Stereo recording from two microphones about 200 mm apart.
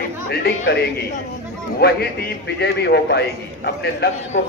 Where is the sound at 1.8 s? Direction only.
50° left (ahead or behind).